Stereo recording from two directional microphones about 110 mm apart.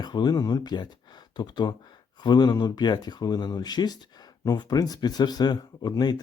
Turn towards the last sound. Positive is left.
turn(degrees=40)  # may be behind; listen again after turning